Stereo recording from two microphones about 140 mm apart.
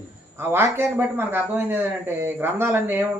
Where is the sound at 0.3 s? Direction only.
15° right (ahead or behind).